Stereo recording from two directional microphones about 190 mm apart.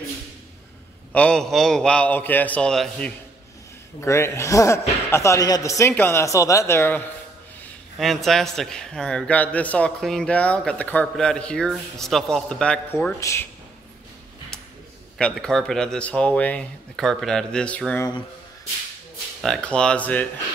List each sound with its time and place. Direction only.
1.1 s a man's voice: 5° left (ahead or behind)
4.0 s a man's voice: 15° left (ahead or behind)
8.0 s a man's voice: centre (ahead or behind)
15.1 s a man's voice: 5° left (ahead or behind)
19.4 s a man's voice: 5° left (ahead or behind)